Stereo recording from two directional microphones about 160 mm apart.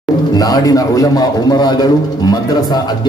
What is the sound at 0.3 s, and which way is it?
A man's voice, 25° left (ahead or behind).